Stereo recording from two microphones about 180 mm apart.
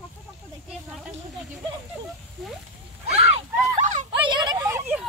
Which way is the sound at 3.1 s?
35° right (ahead or behind).